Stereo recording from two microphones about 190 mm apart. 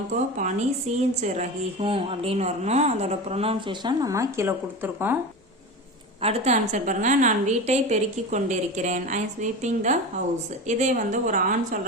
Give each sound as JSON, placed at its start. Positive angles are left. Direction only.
{"t": 0.4, "sound": "a woman's voice", "side_deg": -40}
{"t": 6.2, "sound": "a woman's voice", "side_deg": -35}